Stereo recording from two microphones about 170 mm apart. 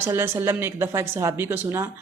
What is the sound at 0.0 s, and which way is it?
A woman's voice, 15° right (ahead or behind).